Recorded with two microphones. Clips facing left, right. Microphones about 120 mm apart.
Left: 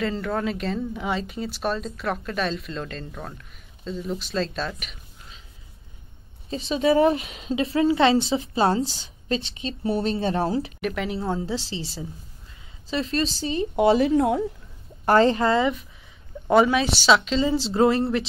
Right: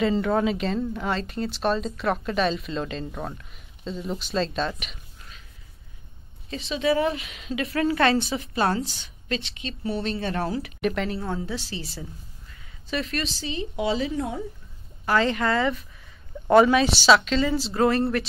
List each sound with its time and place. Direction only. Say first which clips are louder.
0.0 s speech: right 4 dB; 5° right (ahead or behind)
6.5 s a woman's voice: left 3 dB; 35° left (ahead or behind)
10.8 s speech: right 2 dB; centre (ahead or behind)
11.1 s a woman's voice: left 3 dB; 20° left (ahead or behind); by 14.4 s 65° left (ahead or behind)
15.0 s a woman's voice: left 5 dB; 35° left (ahead or behind)
16.4 s speech: right 2 dB; 5° left (ahead or behind)
17.1 s speech: even; 25° left (ahead or behind)